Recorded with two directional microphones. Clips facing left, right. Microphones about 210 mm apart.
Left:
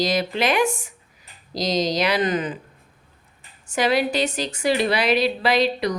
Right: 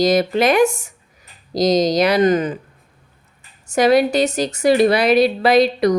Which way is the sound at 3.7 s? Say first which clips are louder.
Right 7 dB; 45° right (ahead or behind).